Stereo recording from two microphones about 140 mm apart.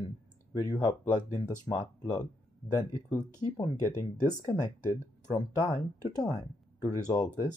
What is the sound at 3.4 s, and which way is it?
Speech, 30° left (ahead or behind).